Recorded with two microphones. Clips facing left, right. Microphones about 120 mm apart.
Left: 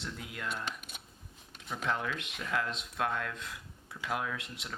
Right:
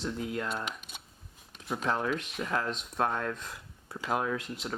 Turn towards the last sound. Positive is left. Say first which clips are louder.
# right 7 dB
turn(degrees=-35)  # may be behind; listen again after turning